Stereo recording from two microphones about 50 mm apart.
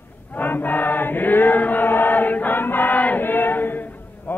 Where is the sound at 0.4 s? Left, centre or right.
Left.